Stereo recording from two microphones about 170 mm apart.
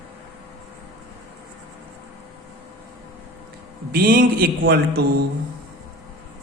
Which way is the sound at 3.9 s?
55° right (ahead or behind).